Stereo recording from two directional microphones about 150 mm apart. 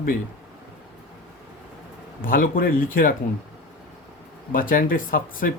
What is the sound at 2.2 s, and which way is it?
Speech, 70° left (ahead or behind).